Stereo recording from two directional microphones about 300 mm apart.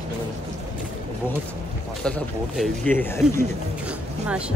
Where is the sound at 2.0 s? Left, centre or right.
Centre.